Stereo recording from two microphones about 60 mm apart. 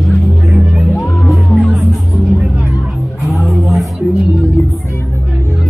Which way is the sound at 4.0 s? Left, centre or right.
Centre.